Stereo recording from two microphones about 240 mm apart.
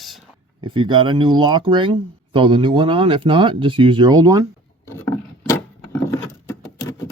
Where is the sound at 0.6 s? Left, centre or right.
Centre.